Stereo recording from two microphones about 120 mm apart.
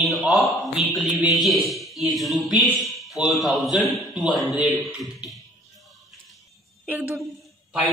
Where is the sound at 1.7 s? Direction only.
Centre (ahead or behind).